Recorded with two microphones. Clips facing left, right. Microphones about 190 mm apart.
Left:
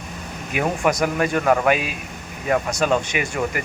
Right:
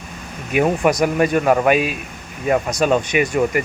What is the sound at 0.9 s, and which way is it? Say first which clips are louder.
Speech: right 4 dB; 20° right (ahead or behind).